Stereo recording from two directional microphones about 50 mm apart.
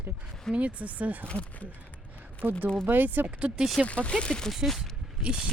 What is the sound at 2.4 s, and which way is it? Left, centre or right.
Speech, right.